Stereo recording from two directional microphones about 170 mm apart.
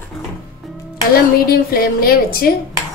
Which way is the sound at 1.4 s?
60° left (ahead or behind).